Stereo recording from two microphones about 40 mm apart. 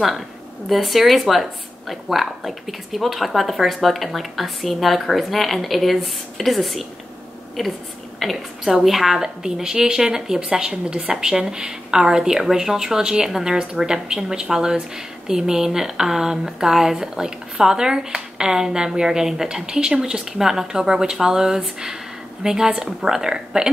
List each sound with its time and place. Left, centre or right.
0.7 s a woman's voice: centre